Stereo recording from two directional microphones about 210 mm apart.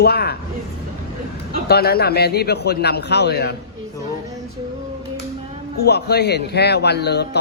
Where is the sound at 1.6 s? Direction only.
50° left (ahead or behind).